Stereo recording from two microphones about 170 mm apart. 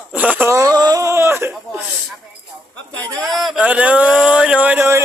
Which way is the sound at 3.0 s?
20° right (ahead or behind).